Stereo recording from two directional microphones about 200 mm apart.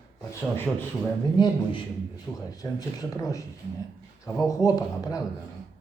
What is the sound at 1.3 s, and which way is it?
A man's voice, 25° left (ahead or behind).